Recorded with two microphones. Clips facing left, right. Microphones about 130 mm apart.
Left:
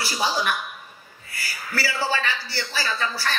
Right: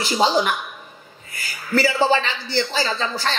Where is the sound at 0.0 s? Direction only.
20° right (ahead or behind).